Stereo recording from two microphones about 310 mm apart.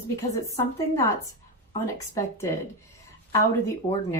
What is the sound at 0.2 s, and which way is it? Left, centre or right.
Speech, centre.